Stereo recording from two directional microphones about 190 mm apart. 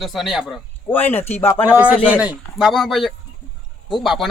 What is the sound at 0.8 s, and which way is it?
Speech, 10° left (ahead or behind).